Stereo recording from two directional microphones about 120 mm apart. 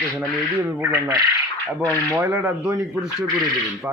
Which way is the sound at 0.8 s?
15° right (ahead or behind).